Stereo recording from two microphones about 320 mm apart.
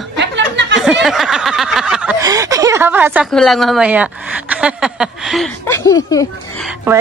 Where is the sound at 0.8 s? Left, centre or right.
Centre.